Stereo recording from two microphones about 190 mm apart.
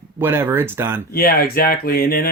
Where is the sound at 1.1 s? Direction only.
50° left (ahead or behind).